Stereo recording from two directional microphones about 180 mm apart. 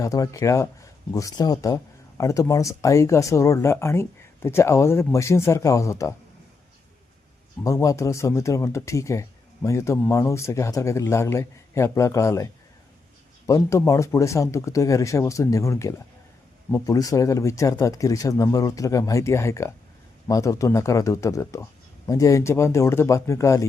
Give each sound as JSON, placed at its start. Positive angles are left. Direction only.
{"t": 0.0, "sound": "speech", "side_deg": 20}
{"t": 7.6, "sound": "speech", "side_deg": 20}
{"t": 13.5, "sound": "speech", "side_deg": 15}